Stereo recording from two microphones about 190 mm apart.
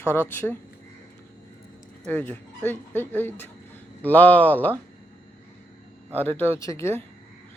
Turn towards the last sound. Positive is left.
turn(degrees=15)  # may be behind; listen again after turning